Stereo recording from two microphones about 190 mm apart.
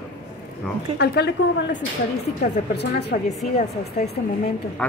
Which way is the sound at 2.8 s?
60° left (ahead or behind).